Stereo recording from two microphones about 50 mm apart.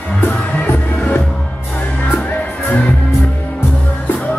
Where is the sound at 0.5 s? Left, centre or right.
Left.